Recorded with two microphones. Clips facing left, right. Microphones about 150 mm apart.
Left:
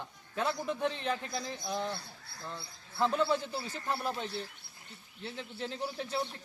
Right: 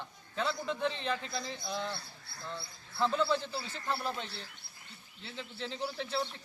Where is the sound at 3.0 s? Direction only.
Centre (ahead or behind).